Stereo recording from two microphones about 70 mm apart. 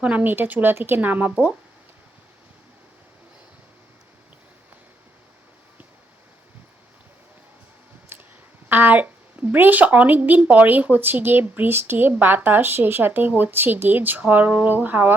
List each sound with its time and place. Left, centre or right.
0.0 s speech: right
8.1 s a sound: right
8.7 s speech: right